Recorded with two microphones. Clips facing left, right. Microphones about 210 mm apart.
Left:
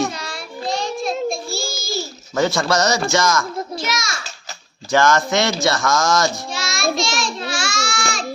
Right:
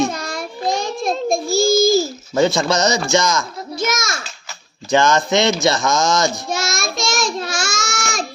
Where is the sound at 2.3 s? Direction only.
20° right (ahead or behind).